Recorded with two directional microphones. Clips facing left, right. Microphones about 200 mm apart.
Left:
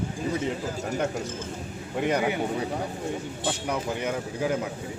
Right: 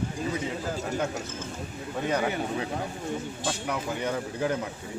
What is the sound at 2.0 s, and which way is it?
Speech, 15° left (ahead or behind).